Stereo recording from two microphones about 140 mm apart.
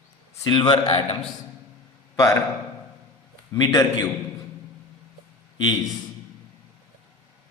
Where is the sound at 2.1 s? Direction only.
20° left (ahead or behind).